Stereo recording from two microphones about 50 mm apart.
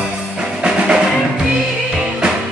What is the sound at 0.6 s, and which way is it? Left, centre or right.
Music, centre.